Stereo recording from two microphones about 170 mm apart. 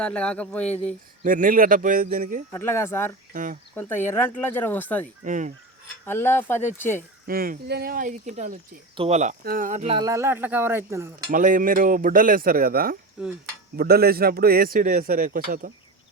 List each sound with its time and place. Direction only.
0.0 s speech: 5° left (ahead or behind)
1.2 s a man's voice: 50° right (ahead or behind)
2.5 s speech: 15° left (ahead or behind)
3.3 s a man's voice: 50° right (ahead or behind)
3.8 s speech: 10° left (ahead or behind)
5.2 s a man's voice: 50° right (ahead or behind)
6.1 s speech: 15° left (ahead or behind)
7.3 s a man's voice: 60° right (ahead or behind); by 9.3 s 40° right (ahead or behind)
9.4 s a man's voice: 55° right (ahead or behind); by 10.0 s 40° right (ahead or behind)
10.0 s speech: 20° right (ahead or behind)
11.3 s a man's voice: 55° right (ahead or behind)
13.2 s a sound: 5° right (ahead or behind)
13.7 s a man's voice: 65° right (ahead or behind)